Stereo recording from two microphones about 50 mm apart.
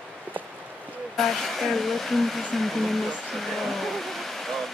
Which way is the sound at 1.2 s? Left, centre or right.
Centre.